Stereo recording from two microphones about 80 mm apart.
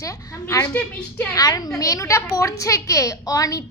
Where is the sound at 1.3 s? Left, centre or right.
Left.